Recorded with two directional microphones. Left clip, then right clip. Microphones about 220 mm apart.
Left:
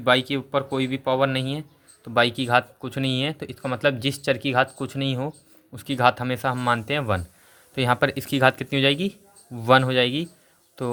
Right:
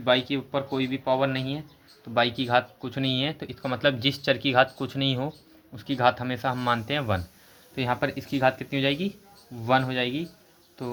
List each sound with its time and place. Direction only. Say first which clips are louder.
0.0 s speech: left 3 dB; 35° left (ahead or behind); by 5.3 s 20° left (ahead or behind)
5.7 s speech: left 3 dB; 30° left (ahead or behind)
7.8 s speech: left 6 dB; 40° left (ahead or behind)